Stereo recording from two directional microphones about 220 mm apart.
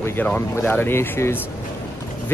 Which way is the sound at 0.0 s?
10° left (ahead or behind).